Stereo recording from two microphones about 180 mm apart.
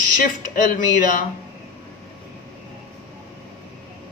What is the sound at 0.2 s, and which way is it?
A man's voice, 50° left (ahead or behind).